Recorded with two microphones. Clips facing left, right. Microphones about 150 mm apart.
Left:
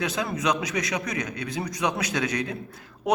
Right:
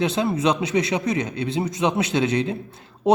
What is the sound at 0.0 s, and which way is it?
A man's voice, 30° right (ahead or behind).